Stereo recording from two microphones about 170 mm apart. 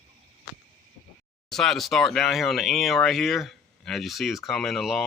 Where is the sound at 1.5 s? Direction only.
Centre (ahead or behind).